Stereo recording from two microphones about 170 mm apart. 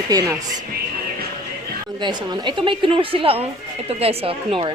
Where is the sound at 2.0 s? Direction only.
25° right (ahead or behind).